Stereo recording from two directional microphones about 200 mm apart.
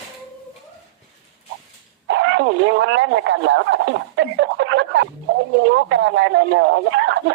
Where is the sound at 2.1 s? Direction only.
65° right (ahead or behind).